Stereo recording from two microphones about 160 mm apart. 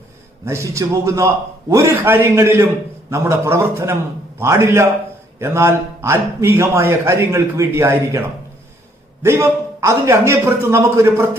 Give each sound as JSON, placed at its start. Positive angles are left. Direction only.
{"t": 0.4, "sound": "a man's voice", "side_deg": -15}